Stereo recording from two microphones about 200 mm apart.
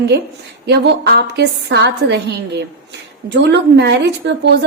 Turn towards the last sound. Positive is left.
turn(degrees=-55)  # may be behind; listen again after turning